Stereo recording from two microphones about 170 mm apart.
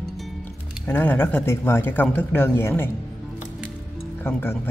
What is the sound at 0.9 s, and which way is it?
Speech, 10° left (ahead or behind).